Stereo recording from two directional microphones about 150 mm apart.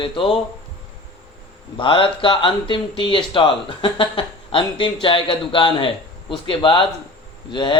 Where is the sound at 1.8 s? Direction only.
35° left (ahead or behind).